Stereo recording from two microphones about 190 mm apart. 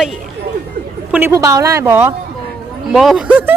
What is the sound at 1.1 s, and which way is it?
A woman's voice, 10° right (ahead or behind).